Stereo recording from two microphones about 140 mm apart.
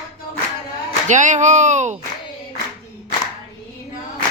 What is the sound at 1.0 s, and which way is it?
Speech, 60° right (ahead or behind).